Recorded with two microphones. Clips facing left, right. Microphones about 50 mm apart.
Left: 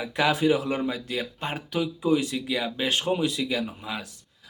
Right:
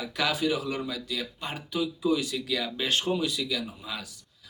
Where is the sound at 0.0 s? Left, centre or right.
Left.